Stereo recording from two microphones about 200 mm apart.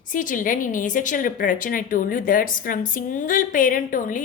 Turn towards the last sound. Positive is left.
turn(degrees=40)  # may be behind; listen again after turning